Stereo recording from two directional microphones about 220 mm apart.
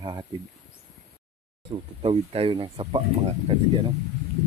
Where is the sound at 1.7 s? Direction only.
25° right (ahead or behind).